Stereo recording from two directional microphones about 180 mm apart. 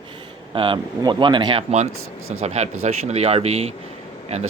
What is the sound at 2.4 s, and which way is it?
Speech, 40° right (ahead or behind).